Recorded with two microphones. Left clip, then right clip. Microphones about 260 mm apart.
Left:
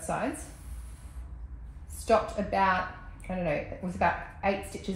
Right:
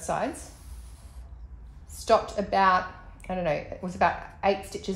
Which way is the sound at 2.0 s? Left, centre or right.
Centre.